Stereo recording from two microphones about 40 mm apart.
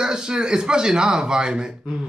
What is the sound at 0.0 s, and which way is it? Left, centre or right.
Speech, centre.